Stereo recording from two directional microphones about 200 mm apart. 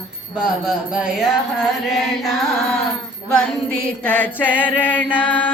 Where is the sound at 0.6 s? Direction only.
5° right (ahead or behind).